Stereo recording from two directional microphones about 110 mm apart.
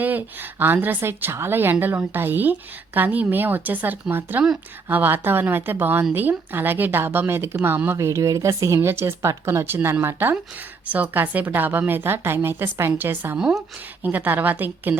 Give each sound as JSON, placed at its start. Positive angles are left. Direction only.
{"t": 0.0, "sound": "a woman's voice", "side_deg": -15}
{"t": 13.4, "sound": "a woman's voice", "side_deg": -5}
{"t": 14.0, "sound": "a woman's voice", "side_deg": -15}